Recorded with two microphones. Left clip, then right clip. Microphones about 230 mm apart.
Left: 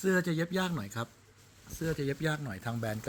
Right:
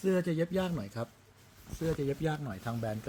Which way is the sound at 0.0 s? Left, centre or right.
Centre.